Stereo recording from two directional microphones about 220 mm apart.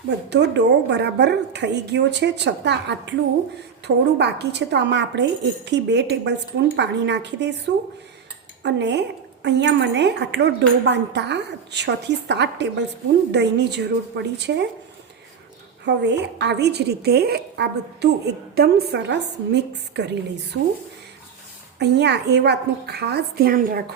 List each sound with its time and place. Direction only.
0.3 s a woman's voice: 50° right (ahead or behind)
15.9 s a woman's voice: 50° right (ahead or behind)
21.8 s a woman's voice: 50° right (ahead or behind)